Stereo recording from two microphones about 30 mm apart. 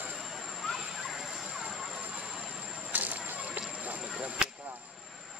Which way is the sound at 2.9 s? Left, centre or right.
Right.